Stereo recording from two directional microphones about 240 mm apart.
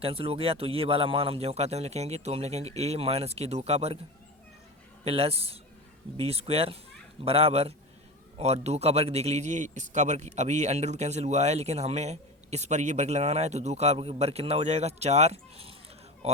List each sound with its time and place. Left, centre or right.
0.0 s a man's voice: right
5.0 s a man's voice: right